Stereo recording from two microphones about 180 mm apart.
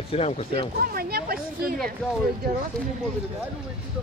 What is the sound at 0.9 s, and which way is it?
Speech, 55° right (ahead or behind).